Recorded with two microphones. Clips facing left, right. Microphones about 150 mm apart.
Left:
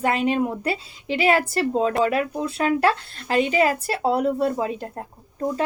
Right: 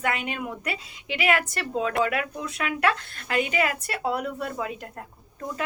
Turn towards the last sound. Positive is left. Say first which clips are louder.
# left 9 dB
turn(degrees=30)  # may be behind; listen again after turning